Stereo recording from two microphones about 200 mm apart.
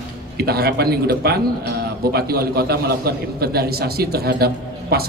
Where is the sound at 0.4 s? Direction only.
50° right (ahead or behind).